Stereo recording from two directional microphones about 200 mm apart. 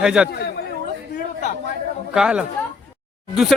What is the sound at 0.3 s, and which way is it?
Speech, 50° left (ahead or behind).